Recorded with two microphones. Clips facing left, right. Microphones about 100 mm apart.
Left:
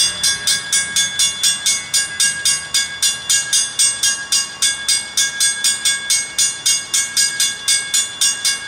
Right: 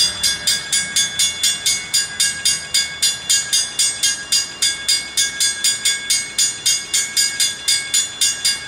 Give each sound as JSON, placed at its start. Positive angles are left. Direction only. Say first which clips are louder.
{"t": 0.0, "sound": "train", "louder": "left 2 dB", "side_deg": 25}